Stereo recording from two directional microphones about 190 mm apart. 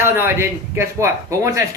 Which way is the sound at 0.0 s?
10° right (ahead or behind).